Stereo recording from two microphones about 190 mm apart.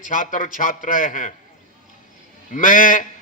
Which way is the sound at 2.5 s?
45° left (ahead or behind).